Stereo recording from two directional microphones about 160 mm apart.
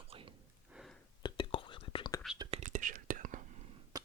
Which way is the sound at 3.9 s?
20° right (ahead or behind).